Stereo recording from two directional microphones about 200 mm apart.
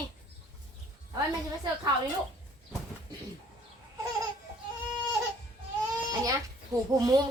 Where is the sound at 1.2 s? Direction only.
20° right (ahead or behind).